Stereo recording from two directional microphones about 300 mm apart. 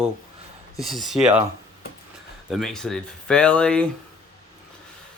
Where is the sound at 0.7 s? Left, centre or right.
Centre.